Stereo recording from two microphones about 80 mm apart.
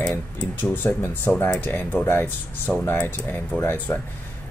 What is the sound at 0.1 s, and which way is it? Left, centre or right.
Speech, left.